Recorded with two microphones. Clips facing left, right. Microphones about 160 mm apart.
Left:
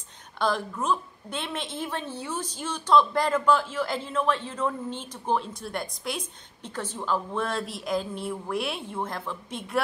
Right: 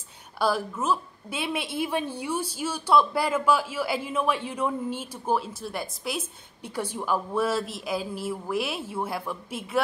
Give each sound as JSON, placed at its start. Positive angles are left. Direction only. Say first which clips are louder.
{"t": 0.4, "sound": "a woman's voice", "louder": "right 1 dB", "side_deg": -5}